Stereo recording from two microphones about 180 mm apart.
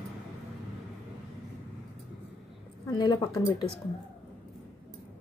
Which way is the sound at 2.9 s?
25° left (ahead or behind).